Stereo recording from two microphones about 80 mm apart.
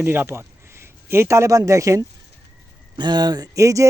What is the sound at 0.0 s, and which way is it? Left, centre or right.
A man's voice, right.